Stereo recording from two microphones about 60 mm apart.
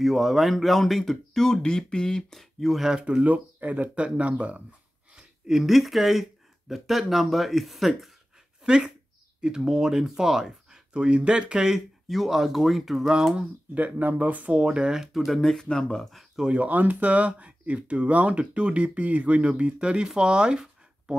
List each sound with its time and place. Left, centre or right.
0.0 s speech: centre
2.6 s speech: centre
3.0 s speech: centre
5.1 s speech: centre
8.6 s speech: centre
13.7 s speech: right
15.1 s speech: centre
16.4 s speech: right